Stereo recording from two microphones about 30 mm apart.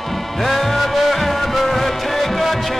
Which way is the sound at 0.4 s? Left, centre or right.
Centre.